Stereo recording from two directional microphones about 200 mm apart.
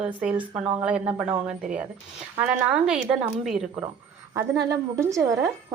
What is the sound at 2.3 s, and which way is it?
Speech, 5° right (ahead or behind).